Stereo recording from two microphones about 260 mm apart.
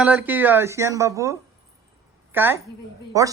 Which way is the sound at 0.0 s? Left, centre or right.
Centre.